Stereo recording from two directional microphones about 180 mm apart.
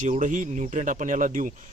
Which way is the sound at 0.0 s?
45° right (ahead or behind).